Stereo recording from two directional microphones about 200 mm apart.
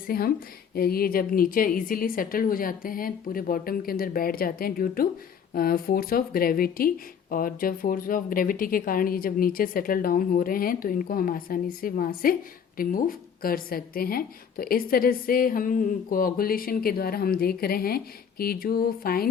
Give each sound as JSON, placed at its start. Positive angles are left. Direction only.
{"t": 0.1, "sound": "speech", "side_deg": 50}